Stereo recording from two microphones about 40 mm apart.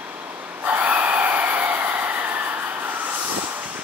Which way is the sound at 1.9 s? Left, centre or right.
Right.